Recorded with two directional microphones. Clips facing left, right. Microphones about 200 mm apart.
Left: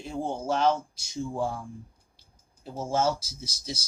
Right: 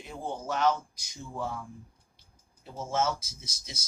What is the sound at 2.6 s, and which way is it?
Speech, 30° left (ahead or behind).